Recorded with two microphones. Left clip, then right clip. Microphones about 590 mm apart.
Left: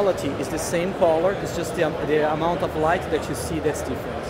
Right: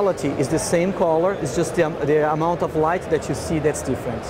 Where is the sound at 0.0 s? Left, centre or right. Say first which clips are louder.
Right 2 dB; right.